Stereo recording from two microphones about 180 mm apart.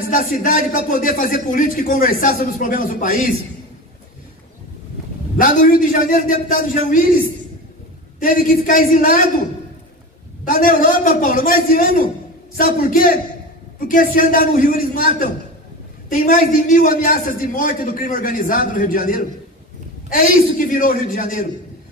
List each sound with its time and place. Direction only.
0.1 s a man's voice: 45° left (ahead or behind)
5.4 s a man's voice: 50° left (ahead or behind)
8.2 s a man's voice: 50° left (ahead or behind)
10.4 s a man's voice: 50° left (ahead or behind)